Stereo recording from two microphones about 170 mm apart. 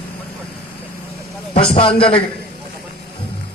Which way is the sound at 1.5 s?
35° left (ahead or behind).